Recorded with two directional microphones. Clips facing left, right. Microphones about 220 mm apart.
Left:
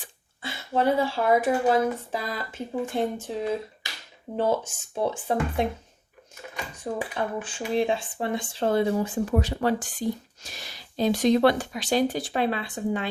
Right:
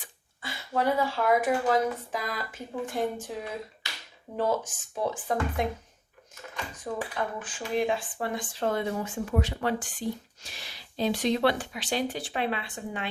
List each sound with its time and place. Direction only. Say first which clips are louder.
0.0 s speech: left 4 dB; 25° left (ahead or behind)
4.4 s speech: left 3 dB; 25° left (ahead or behind)
6.9 s speech: left 3 dB; 25° left (ahead or behind)